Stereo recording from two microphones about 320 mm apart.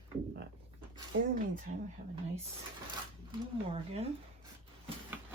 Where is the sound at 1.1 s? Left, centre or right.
Right.